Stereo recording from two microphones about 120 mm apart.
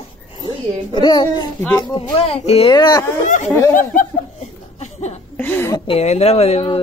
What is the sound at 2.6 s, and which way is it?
Speech, 35° left (ahead or behind).